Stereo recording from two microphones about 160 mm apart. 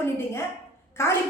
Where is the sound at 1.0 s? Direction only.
15° left (ahead or behind).